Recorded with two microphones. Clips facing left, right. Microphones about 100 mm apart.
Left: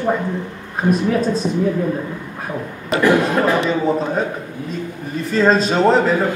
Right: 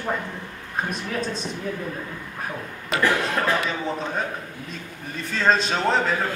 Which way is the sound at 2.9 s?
15° left (ahead or behind).